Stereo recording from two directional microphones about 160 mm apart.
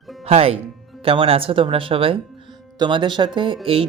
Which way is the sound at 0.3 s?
40° right (ahead or behind).